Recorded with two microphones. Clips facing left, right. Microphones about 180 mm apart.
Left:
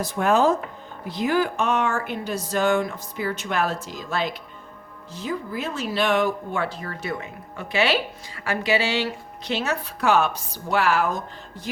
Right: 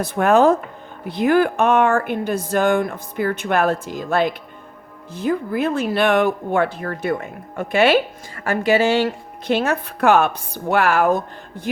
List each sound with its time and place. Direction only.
0.0 s speech: 60° right (ahead or behind)